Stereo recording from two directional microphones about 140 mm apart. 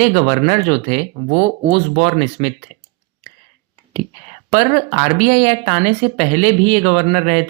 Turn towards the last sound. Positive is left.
turn(degrees=-50)  # may be behind; listen again after turning